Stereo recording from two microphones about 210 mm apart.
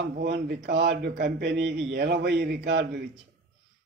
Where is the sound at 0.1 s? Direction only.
50° right (ahead or behind).